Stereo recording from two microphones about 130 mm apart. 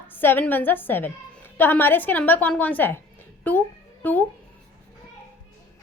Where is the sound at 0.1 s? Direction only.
15° left (ahead or behind).